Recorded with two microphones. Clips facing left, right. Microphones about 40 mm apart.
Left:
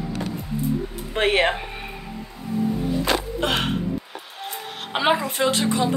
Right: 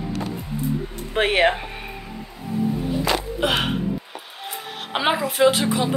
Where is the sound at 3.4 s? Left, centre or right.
Centre.